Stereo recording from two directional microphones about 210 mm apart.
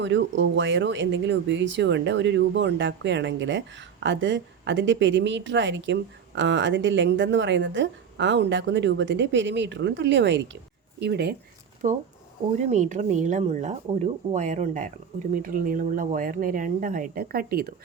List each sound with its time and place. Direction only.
0.0 s speech: 60° right (ahead or behind)
11.8 s speech: 40° right (ahead or behind)